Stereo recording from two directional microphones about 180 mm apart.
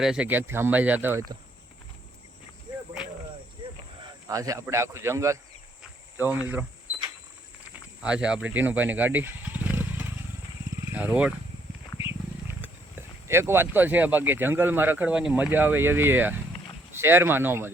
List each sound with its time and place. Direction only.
0.0 s speech: 5° right (ahead or behind)
4.0 s speech: 20° right (ahead or behind)
8.0 s speech: 5° right (ahead or behind)
10.8 s vehicle: 10° right (ahead or behind)
11.9 s speech: 10° right (ahead or behind)